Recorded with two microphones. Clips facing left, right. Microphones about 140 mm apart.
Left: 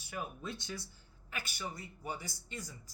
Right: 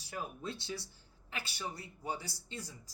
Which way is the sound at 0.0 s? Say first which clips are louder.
Even; 30° right (ahead or behind).